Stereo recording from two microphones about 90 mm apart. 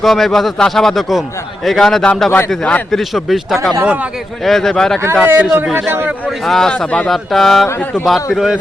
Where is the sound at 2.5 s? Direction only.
10° left (ahead or behind).